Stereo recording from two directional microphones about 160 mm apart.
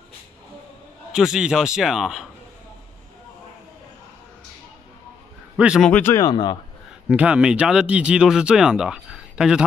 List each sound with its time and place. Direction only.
1.1 s speech: 5° right (ahead or behind)
5.6 s speech: 5° right (ahead or behind)
5.9 s speech: 10° left (ahead or behind)
6.2 s speech: 25° left (ahead or behind)
7.1 s speech: 10° right (ahead or behind)